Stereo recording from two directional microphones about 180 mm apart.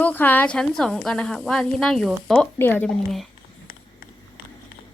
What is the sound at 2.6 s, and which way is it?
Speech, 10° left (ahead or behind).